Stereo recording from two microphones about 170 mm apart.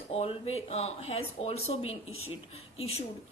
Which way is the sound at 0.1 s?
35° left (ahead or behind).